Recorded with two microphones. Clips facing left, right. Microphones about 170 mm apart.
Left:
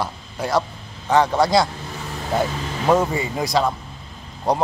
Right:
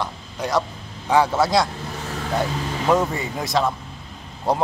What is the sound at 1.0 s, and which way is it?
Speech, 10° right (ahead or behind).